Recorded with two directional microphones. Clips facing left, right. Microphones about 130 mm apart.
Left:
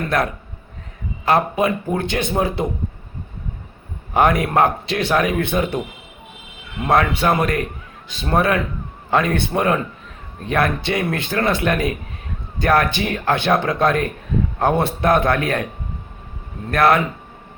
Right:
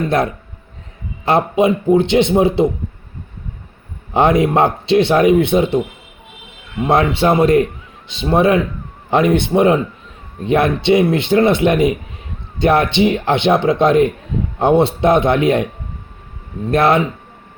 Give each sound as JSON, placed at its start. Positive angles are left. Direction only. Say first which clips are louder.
{"t": 1.2, "sound": "a man's voice", "louder": "right 4 dB", "side_deg": -25}
{"t": 4.1, "sound": "a man's voice", "louder": "right 4 dB", "side_deg": -25}
{"t": 6.8, "sound": "a man's voice", "louder": "right 3 dB", "side_deg": -25}
{"t": 16.7, "sound": "a man's voice", "louder": "right 2 dB", "side_deg": -25}